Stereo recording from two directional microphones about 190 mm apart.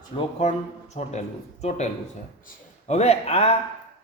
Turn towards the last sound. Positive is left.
turn(degrees=30)  # may be behind; listen again after turning